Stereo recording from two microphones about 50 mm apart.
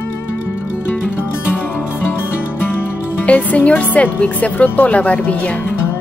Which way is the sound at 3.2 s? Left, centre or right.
Left.